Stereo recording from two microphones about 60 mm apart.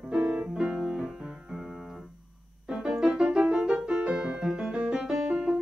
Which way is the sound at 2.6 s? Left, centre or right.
Centre.